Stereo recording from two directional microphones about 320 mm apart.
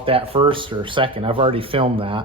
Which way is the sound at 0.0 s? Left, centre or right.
Centre.